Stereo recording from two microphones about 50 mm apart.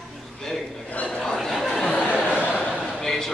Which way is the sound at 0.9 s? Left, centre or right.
Left.